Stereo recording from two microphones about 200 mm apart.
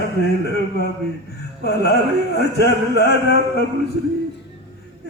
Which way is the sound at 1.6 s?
55° left (ahead or behind).